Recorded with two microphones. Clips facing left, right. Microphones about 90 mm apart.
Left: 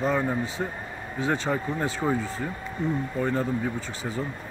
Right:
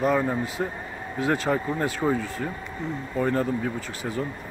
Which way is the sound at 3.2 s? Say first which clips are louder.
Right 3 dB; 5° left (ahead or behind).